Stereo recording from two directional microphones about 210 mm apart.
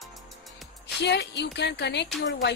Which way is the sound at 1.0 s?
55° left (ahead or behind).